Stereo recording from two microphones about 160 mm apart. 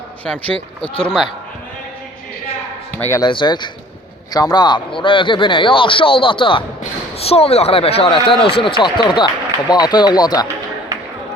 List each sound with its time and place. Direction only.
0.3 s speech: 10° left (ahead or behind)
3.2 s speech: 30° left (ahead or behind)